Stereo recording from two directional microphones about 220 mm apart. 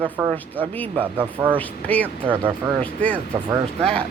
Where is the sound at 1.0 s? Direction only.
5° left (ahead or behind).